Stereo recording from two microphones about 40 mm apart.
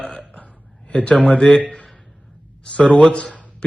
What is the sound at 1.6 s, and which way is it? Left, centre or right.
Speech, left.